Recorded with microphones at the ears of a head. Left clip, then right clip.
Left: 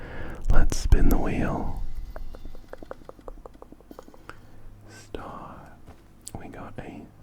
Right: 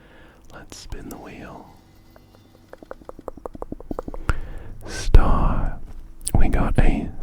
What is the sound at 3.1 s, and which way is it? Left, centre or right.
Stomach rumble, right.